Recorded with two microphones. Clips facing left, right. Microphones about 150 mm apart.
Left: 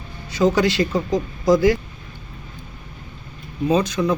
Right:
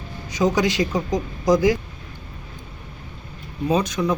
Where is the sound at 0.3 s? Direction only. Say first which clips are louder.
Left 2 dB; 15° right (ahead or behind).